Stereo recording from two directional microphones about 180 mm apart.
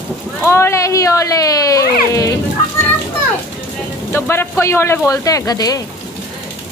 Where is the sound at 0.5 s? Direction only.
15° left (ahead or behind).